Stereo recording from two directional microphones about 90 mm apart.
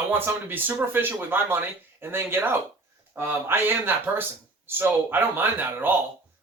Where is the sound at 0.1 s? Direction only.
25° right (ahead or behind).